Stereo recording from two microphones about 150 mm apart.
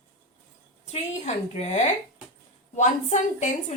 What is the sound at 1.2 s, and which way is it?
A woman's voice, 50° left (ahead or behind).